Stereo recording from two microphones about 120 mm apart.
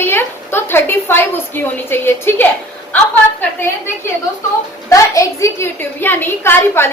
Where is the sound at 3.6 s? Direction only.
20° left (ahead or behind).